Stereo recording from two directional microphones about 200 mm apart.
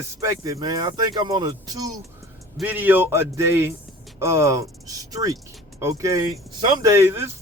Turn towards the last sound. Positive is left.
turn(degrees=-15)  # may be behind; listen again after turning